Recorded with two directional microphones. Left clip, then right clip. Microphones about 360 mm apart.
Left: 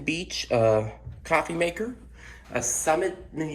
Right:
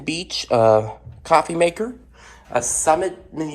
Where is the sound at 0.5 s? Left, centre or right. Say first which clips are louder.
Right 7 dB; centre.